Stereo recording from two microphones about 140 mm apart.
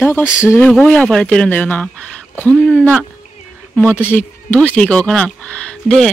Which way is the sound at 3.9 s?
15° left (ahead or behind).